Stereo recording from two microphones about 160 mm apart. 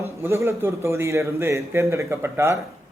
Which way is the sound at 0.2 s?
15° right (ahead or behind).